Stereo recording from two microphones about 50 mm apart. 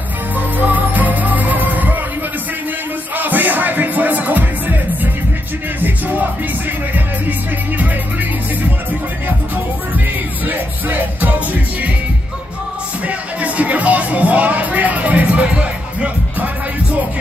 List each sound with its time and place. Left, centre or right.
0.6 s music: right
3.2 s music: right
10.4 s music: right
13.0 s music: right